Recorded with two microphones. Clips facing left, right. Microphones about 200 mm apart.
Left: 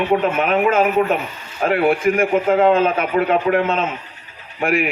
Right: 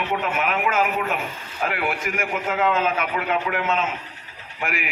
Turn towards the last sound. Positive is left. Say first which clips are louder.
# left 10 dB
turn(degrees=35)  # may be behind; listen again after turning